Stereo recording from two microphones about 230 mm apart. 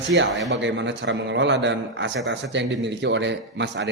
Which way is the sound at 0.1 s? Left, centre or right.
Right.